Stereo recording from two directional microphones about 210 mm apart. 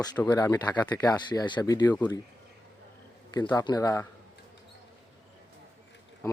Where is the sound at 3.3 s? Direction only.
20° left (ahead or behind).